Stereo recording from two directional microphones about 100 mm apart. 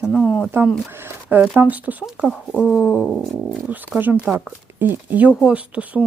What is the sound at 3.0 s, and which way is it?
Dog, centre (ahead or behind).